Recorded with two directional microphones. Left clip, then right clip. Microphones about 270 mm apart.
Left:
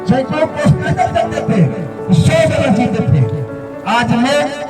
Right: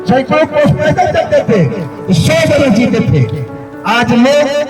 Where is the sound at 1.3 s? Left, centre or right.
Centre.